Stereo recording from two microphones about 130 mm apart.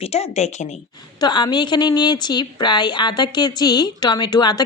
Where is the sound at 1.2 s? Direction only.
35° left (ahead or behind).